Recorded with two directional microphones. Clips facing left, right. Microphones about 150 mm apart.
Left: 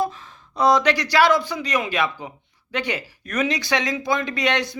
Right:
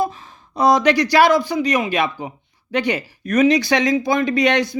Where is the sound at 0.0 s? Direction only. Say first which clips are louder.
Right 3 dB; 15° right (ahead or behind).